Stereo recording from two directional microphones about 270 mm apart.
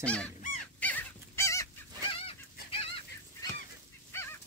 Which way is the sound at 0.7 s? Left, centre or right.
Centre.